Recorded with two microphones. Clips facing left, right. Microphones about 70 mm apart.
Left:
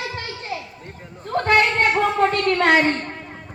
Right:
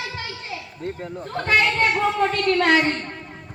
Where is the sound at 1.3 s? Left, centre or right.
Left.